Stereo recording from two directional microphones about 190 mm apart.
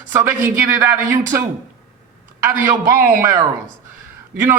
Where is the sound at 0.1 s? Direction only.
15° right (ahead or behind).